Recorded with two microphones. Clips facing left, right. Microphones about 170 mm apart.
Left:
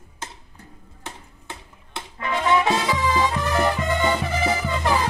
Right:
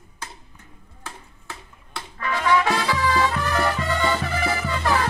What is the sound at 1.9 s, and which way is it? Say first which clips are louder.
Music: left 1 dB; 25° left (ahead or behind).